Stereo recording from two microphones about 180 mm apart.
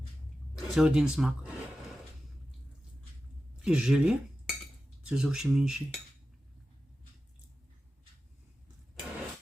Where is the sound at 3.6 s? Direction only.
5° right (ahead or behind).